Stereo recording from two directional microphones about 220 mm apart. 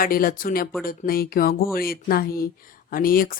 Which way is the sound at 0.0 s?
40° left (ahead or behind).